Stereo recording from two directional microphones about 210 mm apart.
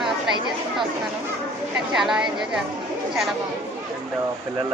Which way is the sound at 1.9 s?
Centre (ahead or behind).